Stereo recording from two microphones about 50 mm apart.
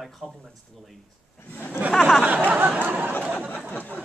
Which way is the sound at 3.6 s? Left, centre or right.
Left.